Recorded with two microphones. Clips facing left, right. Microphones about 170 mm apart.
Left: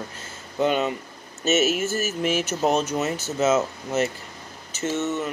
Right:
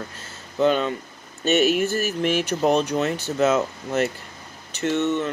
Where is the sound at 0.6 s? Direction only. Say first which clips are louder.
Right 2 dB; 10° left (ahead or behind).